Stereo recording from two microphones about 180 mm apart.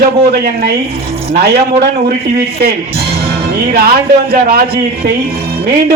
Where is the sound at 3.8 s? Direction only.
55° right (ahead or behind).